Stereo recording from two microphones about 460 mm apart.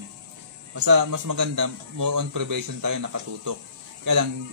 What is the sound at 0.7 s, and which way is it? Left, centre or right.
A man's voice, right.